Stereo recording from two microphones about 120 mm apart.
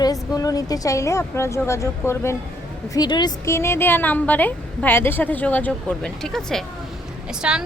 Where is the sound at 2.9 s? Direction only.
35° left (ahead or behind).